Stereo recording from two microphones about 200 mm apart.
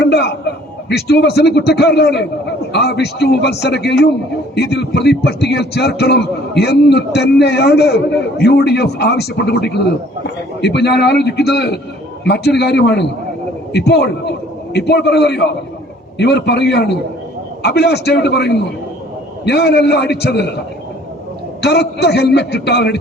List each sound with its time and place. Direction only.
0.0 s a sound: 55° left (ahead or behind)
0.9 s a man's voice: 55° left (ahead or behind)
21.6 s a man's voice: 55° left (ahead or behind)